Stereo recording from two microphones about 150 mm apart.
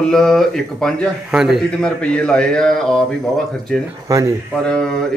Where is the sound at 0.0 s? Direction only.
5° left (ahead or behind).